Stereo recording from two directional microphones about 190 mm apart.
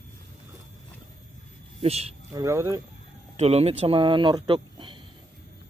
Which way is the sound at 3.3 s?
35° right (ahead or behind).